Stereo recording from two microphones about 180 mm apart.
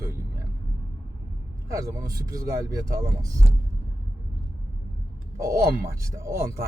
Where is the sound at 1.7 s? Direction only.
20° right (ahead or behind).